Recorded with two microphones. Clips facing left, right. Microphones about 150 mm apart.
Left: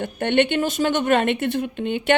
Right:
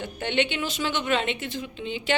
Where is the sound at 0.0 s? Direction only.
55° left (ahead or behind).